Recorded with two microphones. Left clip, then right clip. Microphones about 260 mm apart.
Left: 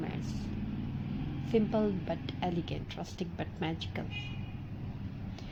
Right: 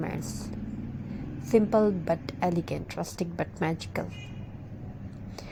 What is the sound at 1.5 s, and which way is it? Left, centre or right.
A woman's voice, right.